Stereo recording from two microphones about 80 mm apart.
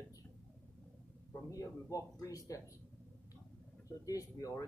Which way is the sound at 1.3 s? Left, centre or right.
Left.